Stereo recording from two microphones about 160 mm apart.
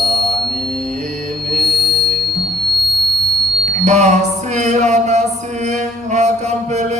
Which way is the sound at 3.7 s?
45° right (ahead or behind).